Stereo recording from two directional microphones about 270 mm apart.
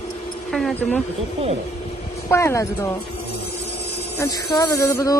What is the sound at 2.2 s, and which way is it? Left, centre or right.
Music, centre.